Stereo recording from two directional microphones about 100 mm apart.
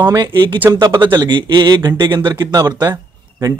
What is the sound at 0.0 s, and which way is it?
Speech, 40° right (ahead or behind).